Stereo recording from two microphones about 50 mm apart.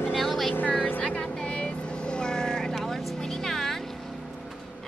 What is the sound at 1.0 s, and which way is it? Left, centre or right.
Vehicle, left.